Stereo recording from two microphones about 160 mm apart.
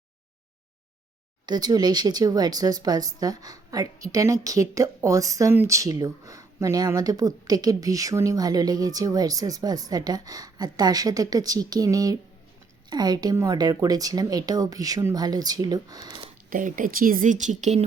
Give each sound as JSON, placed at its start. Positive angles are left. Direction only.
{"t": 1.5, "sound": "a woman's voice", "side_deg": -25}
{"t": 16.5, "sound": "speech", "side_deg": -55}